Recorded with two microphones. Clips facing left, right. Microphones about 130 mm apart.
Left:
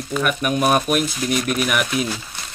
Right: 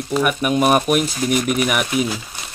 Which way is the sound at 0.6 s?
5° right (ahead or behind).